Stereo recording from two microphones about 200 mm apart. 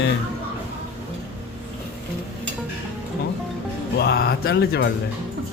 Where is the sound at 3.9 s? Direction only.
50° left (ahead or behind).